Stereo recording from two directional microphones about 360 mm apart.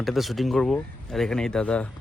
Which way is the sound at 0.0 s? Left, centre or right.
Centre.